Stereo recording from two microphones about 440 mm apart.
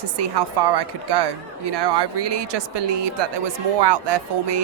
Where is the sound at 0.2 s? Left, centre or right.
Right.